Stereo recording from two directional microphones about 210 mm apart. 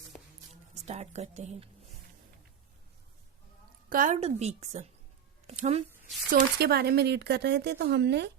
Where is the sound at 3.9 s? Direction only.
40° right (ahead or behind).